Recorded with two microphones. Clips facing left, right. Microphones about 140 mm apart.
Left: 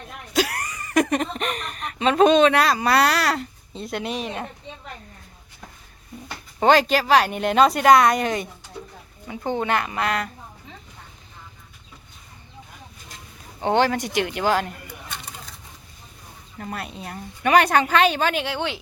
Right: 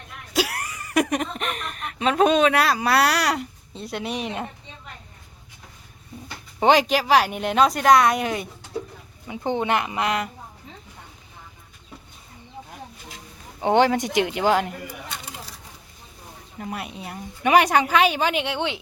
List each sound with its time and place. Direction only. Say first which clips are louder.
0.3 s speech: left 1 dB; 5° right (ahead or behind)
3.8 s a woman's voice: left 1 dB; centre (ahead or behind)
6.6 s a woman's voice: left 1 dB; 15° right (ahead or behind)
9.2 s a woman's voice: right 1 dB; 20° right (ahead or behind)
13.6 s a woman's voice: right 2 dB; 15° right (ahead or behind)
16.6 s a woman's voice: even; 10° right (ahead or behind)